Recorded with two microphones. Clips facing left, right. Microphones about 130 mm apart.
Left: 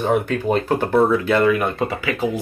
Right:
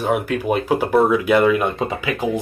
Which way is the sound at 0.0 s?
5° right (ahead or behind).